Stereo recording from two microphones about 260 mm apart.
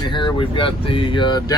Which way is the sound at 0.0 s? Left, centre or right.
Centre.